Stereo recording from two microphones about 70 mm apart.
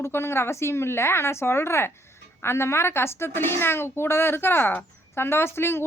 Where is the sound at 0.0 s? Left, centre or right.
Left.